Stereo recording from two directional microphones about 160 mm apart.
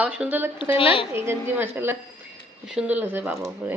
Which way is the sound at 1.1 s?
15° right (ahead or behind).